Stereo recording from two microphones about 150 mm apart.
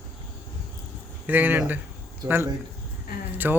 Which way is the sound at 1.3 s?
10° right (ahead or behind).